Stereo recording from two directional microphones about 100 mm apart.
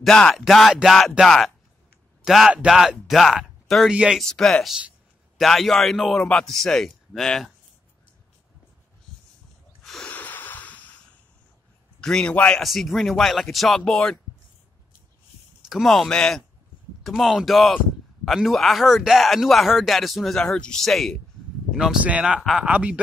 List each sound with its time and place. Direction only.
0.0 s a man's voice: 5° left (ahead or behind); by 4.2 s 10° right (ahead or behind)
4.2 s speech: 5° left (ahead or behind)
10.0 s a sound: 15° left (ahead or behind)
12.0 s a man's voice: 5° left (ahead or behind)
12.6 s speech: centre (ahead or behind)
15.7 s speech: centre (ahead or behind)
21.7 s speech: 10° right (ahead or behind)